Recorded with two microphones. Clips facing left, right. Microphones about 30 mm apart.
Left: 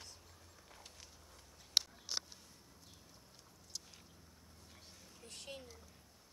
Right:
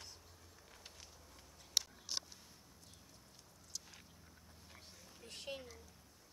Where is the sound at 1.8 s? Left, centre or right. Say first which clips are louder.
Left 4 dB; left.